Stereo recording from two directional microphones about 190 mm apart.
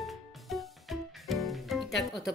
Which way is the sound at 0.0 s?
Centre (ahead or behind).